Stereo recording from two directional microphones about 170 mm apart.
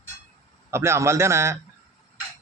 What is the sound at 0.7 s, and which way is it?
Speech, 15° right (ahead or behind).